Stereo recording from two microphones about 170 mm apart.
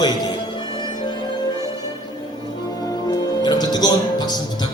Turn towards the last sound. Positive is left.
turn(degrees=25)  # may be behind; listen again after turning